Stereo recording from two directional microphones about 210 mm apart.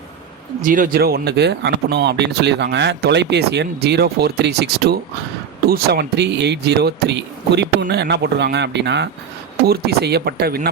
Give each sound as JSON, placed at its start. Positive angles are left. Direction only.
{"t": 0.6, "sound": "speech", "side_deg": -40}